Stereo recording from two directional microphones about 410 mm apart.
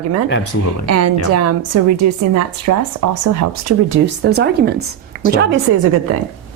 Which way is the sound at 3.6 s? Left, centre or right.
Right.